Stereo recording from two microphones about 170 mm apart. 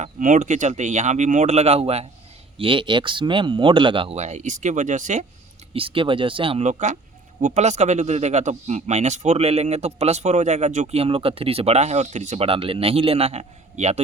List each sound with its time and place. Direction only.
0.0 s speech: 50° right (ahead or behind)
5.7 s speech: 30° right (ahead or behind)